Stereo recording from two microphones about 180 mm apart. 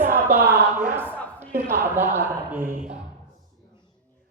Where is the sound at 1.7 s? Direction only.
15° right (ahead or behind).